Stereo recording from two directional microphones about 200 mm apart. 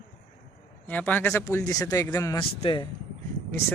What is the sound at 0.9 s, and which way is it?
Speech, 10° left (ahead or behind).